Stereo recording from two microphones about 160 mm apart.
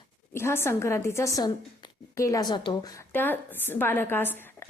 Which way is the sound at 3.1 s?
10° left (ahead or behind).